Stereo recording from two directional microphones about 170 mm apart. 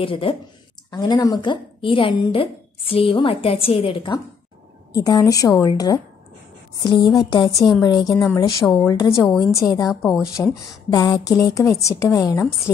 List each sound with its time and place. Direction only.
0.0 s a woman's voice: 30° left (ahead or behind)
10.3 s speech: 5° right (ahead or behind)
10.9 s a woman's voice: 25° left (ahead or behind)